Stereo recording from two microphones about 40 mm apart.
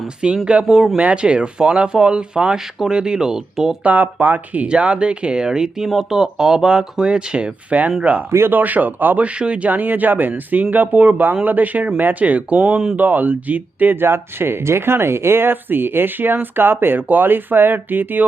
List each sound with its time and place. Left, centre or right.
0.2 s speech: centre
3.8 s speech: right
4.7 s speech: right
8.5 s speech: right
9.2 s speech: right
9.6 s speech: right
12.5 s speech: right
13.0 s speech: right
13.9 s speech: right